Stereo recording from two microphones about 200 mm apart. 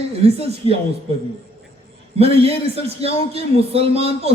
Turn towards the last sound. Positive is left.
turn(degrees=-30)  # may be behind; listen again after turning